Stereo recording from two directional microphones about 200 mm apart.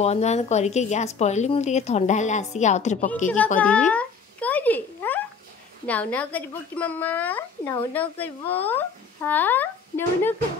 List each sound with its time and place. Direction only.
0.0 s speech: 35° left (ahead or behind)
3.5 s a sound: 5° left (ahead or behind)
5.9 s speech: 5° left (ahead or behind)